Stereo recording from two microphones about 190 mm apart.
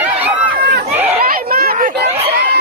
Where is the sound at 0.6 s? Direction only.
55° right (ahead or behind).